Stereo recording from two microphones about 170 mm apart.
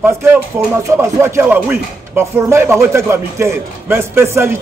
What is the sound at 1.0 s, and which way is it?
A man's voice, 15° right (ahead or behind).